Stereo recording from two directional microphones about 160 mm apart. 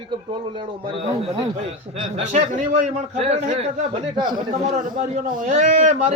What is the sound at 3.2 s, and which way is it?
Speech, 40° right (ahead or behind).